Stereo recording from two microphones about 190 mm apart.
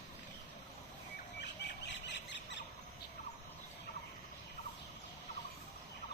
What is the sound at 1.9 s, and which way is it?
Squeal, 70° left (ahead or behind).